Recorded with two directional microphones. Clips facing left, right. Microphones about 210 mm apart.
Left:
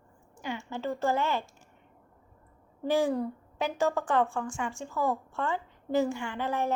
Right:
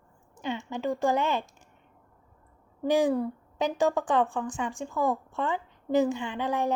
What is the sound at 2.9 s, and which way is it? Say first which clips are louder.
A woman's voice: right 3 dB; 15° right (ahead or behind).